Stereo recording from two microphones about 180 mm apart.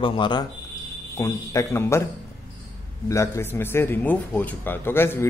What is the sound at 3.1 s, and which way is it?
A man's voice, 15° left (ahead or behind).